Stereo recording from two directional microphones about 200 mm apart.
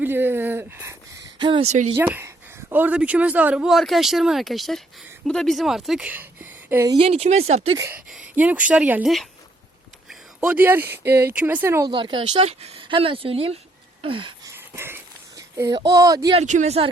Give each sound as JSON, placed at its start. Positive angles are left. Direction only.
{"t": 0.0, "sound": "speech", "side_deg": -10}
{"t": 1.4, "sound": "speech", "side_deg": -25}
{"t": 2.0, "sound": "speech", "side_deg": -10}
{"t": 6.9, "sound": "speech", "side_deg": -30}
{"t": 7.8, "sound": "speech", "side_deg": -10}
{"t": 10.1, "sound": "a sound", "side_deg": -5}
{"t": 10.9, "sound": "speech", "side_deg": -10}
{"t": 11.9, "sound": "speech", "side_deg": -25}
{"t": 14.0, "sound": "wheeze", "side_deg": -25}
{"t": 14.5, "sound": "a sound", "side_deg": -10}
{"t": 16.4, "sound": "speech", "side_deg": -35}